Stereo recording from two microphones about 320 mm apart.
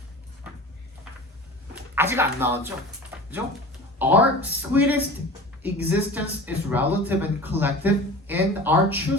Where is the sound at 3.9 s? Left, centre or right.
Centre.